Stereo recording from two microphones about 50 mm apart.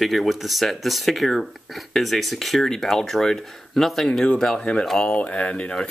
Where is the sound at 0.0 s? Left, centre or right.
Centre.